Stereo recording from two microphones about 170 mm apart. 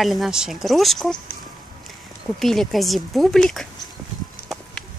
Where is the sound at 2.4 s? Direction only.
Centre (ahead or behind).